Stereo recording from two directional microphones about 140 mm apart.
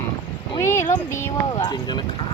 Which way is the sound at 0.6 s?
20° left (ahead or behind).